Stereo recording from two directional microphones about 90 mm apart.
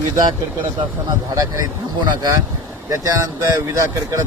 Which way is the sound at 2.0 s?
55° right (ahead or behind).